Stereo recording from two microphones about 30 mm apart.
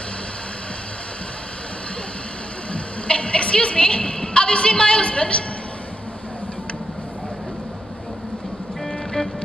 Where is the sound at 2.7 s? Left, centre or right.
Left.